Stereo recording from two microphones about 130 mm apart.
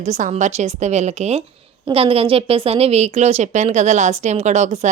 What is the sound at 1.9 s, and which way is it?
A woman's voice, 45° right (ahead or behind).